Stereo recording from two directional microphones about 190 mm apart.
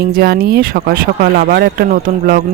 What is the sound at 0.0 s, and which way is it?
Speech, 50° right (ahead or behind).